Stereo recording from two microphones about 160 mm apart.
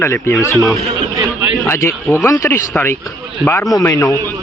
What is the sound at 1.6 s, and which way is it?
A man's voice, 20° left (ahead or behind).